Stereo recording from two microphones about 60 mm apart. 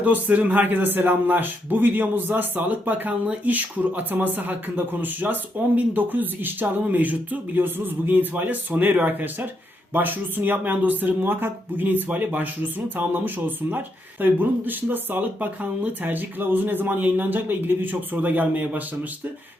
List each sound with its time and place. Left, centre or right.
0.0 s a man's voice: right